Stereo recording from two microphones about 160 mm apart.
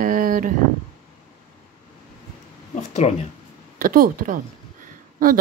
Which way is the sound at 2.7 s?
45° left (ahead or behind).